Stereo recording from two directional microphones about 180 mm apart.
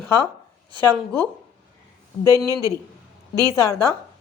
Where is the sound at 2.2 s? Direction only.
15° left (ahead or behind).